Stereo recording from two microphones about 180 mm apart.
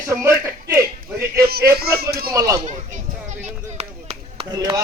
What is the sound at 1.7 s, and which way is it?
Speech, 60° right (ahead or behind).